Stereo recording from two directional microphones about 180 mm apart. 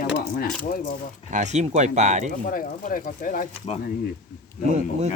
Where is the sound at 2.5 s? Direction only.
50° left (ahead or behind).